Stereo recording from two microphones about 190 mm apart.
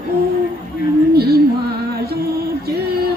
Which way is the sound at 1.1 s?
55° right (ahead or behind).